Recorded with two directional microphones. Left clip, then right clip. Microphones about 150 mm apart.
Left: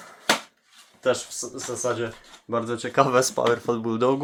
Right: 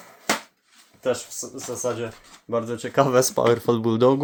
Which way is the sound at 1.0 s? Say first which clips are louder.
Left 1 dB; 20° right (ahead or behind).